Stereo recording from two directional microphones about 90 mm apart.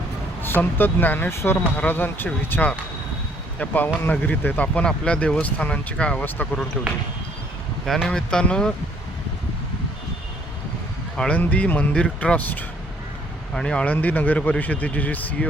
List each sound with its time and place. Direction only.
0.4 s speech: 20° left (ahead or behind)
8.0 s speech: 10° left (ahead or behind)
11.3 s speech: 15° left (ahead or behind)